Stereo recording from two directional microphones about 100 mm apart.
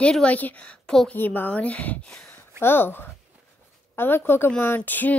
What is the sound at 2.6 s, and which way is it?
A woman's voice, 20° left (ahead or behind).